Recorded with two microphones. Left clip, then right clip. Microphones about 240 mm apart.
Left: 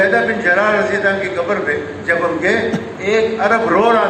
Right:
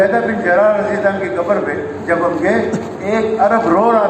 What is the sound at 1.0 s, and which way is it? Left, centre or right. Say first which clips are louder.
A man's voice: right 1 dB; left.